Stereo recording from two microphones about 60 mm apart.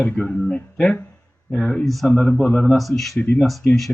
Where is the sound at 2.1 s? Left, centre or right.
Centre.